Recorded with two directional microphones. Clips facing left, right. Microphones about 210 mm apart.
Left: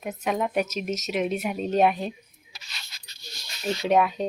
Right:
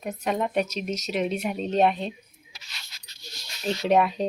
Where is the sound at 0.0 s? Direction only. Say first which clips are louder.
Even; centre (ahead or behind).